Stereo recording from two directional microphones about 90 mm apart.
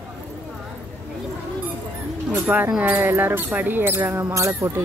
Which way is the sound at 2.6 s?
15° right (ahead or behind).